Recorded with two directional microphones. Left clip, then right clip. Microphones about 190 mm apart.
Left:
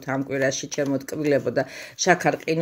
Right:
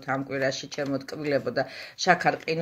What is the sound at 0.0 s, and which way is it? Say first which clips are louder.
Speech: left 3 dB; 55° left (ahead or behind).